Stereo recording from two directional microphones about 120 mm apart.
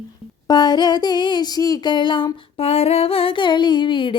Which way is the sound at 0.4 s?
35° left (ahead or behind).